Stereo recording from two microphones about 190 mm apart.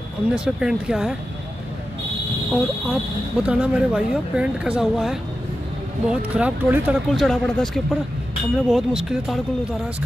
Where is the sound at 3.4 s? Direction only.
5° right (ahead or behind).